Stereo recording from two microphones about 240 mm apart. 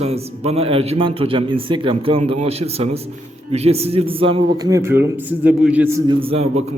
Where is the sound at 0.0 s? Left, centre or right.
Right.